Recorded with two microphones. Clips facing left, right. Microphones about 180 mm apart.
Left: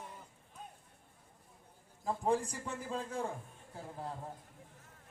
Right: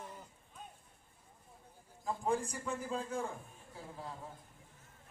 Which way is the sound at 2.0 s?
35° left (ahead or behind).